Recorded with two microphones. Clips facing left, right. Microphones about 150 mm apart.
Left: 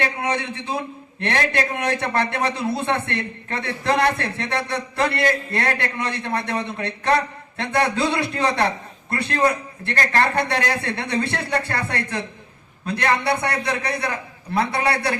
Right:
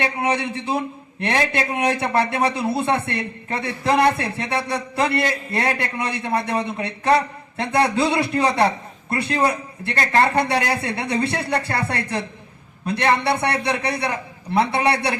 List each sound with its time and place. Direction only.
1.2 s a man's voice: 15° right (ahead or behind)